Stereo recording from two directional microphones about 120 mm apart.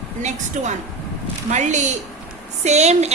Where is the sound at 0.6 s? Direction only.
90° right.